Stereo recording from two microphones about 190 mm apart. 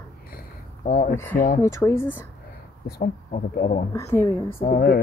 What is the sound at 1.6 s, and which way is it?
Speech, 15° left (ahead or behind).